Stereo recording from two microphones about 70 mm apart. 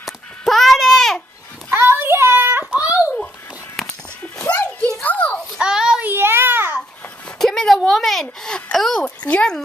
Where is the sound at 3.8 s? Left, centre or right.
Centre.